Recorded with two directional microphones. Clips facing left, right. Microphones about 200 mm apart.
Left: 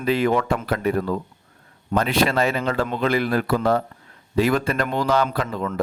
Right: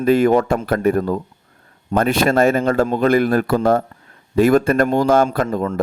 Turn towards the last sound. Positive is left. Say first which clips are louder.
# right 6 dB
turn(degrees=-45)  # may be behind; listen again after turning